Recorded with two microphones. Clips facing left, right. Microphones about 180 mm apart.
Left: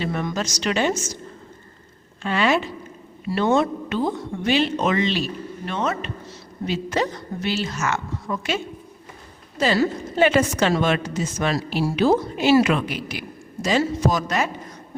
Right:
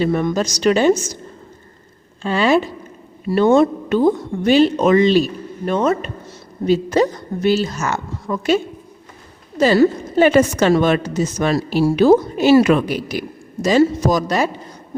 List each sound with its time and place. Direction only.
0.0 s a woman's voice: 45° right (ahead or behind)
2.2 s a woman's voice: 35° right (ahead or behind)
3.2 s a man's voice: 50° right (ahead or behind); by 14.7 s 30° right (ahead or behind)